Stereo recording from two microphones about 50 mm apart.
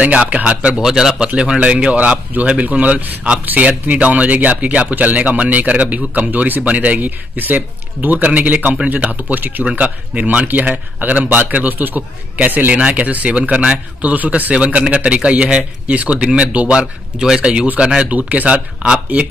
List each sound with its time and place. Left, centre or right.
0.0 s speech: right
0.7 s speech: centre
1.2 s speech: centre; by 12.7 s right
12.7 s speech: right
14.1 s speech: right